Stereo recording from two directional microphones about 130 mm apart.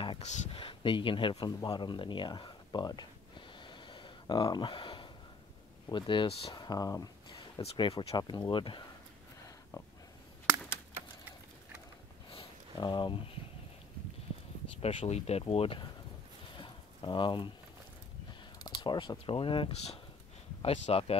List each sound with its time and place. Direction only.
0.2 s speech: 55° left (ahead or behind)
1.4 s a sound: 35° left (ahead or behind)
5.9 s speech: 40° left (ahead or behind)
6.5 s speech: 30° left (ahead or behind); by 8.2 s 50° left (ahead or behind)
8.2 s speech: 35° left (ahead or behind)
12.3 s a sound: 40° left (ahead or behind)
14.8 s speech: 45° left (ahead or behind)
16.5 s a sound: 40° left (ahead or behind)
18.6 s speech: 35° left (ahead or behind); by 21.2 s 55° left (ahead or behind)